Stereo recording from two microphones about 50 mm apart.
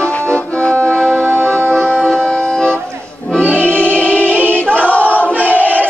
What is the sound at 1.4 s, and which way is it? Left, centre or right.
Music, centre.